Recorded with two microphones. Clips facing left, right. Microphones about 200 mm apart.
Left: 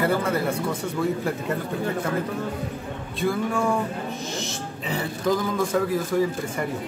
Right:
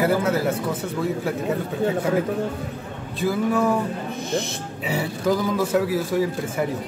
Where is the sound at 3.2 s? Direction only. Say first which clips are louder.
Right 3 dB; 5° right (ahead or behind).